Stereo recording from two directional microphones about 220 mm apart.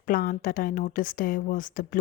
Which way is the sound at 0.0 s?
40° left (ahead or behind).